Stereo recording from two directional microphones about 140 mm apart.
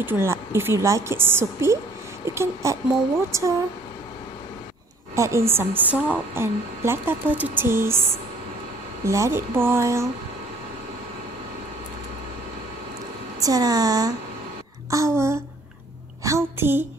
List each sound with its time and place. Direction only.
0.0 s a woman's voice: 15° right (ahead or behind)
5.1 s a woman's voice: 20° right (ahead or behind)
9.0 s speech: 20° right (ahead or behind)
13.4 s a woman's voice: 25° right (ahead or behind)